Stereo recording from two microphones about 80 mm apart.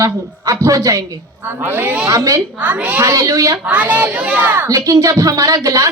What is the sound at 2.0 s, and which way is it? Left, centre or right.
Speech, right.